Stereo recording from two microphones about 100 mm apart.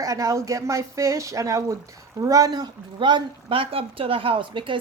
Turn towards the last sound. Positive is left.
turn(degrees=-55)  # may be behind; listen again after turning